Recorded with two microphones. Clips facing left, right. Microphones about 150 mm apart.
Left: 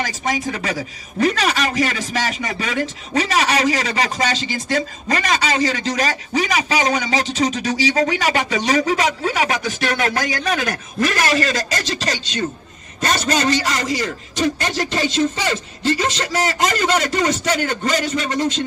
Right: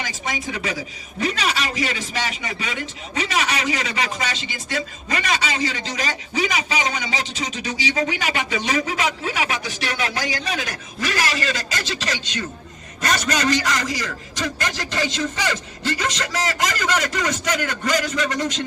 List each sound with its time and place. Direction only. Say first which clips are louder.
0.0 s a man's voice: left 6 dB; 40° left (ahead or behind); by 18.6 s 25° left (ahead or behind)